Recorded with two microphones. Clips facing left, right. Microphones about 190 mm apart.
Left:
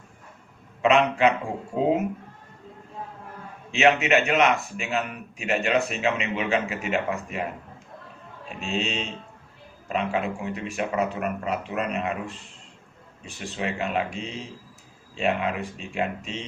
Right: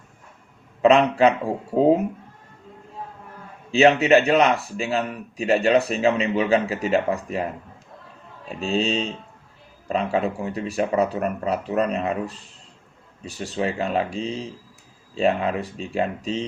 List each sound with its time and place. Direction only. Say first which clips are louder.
0.8 s a man's voice: right 4 dB; 35° right (ahead or behind)
3.7 s a man's voice: right 5 dB; 35° right (ahead or behind)
8.4 s a man's voice: right 6 dB; 35° right (ahead or behind)